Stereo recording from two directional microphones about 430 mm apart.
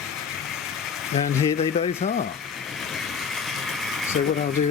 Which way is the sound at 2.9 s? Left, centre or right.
Centre.